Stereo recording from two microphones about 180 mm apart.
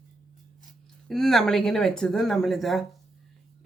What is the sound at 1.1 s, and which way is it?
Speech, centre (ahead or behind).